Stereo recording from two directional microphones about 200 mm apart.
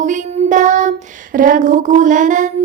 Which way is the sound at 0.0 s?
40° right (ahead or behind).